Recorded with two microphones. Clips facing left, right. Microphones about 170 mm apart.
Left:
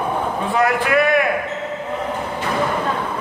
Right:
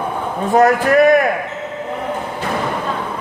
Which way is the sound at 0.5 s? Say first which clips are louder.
Right 6 dB; 40° right (ahead or behind).